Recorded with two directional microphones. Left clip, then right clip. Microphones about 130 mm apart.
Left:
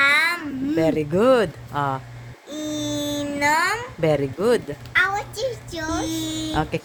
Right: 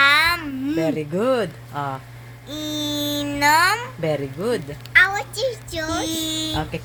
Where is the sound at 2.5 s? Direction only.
15° left (ahead or behind).